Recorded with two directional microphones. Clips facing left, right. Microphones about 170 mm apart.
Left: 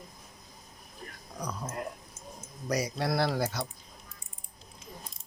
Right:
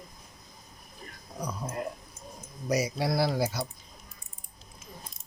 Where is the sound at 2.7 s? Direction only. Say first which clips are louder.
Right 2 dB; 10° right (ahead or behind).